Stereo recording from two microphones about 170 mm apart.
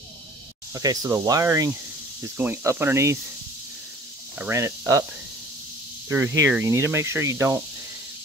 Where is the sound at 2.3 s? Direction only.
10° right (ahead or behind).